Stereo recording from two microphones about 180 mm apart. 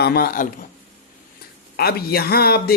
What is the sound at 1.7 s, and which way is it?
Speech, 60° left (ahead or behind).